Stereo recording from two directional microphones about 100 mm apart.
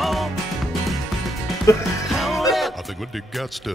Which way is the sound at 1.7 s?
30° left (ahead or behind).